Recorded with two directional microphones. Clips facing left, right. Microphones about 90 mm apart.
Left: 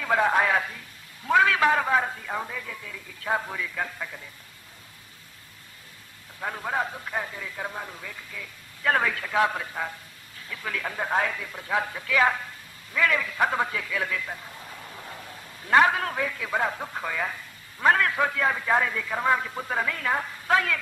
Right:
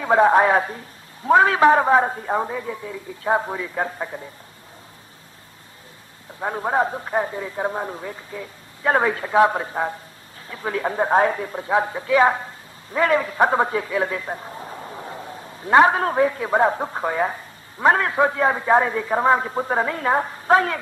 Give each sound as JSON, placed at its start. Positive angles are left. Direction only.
{"t": 0.0, "sound": "speech", "side_deg": -25}
{"t": 6.4, "sound": "speech", "side_deg": -30}